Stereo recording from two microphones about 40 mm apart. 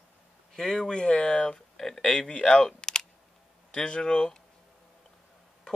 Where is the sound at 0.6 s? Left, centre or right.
Centre.